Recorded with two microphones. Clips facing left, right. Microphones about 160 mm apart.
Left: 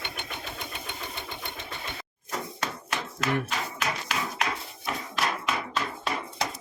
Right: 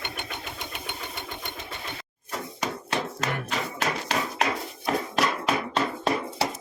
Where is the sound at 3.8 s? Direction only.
35° right (ahead or behind).